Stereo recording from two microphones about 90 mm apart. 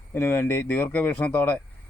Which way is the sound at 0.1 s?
25° left (ahead or behind).